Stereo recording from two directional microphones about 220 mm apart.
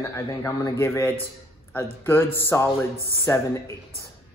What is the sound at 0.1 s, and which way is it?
Speech, 15° left (ahead or behind).